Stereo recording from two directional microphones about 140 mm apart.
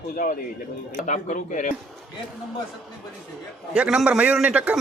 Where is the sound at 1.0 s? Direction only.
65° left (ahead or behind).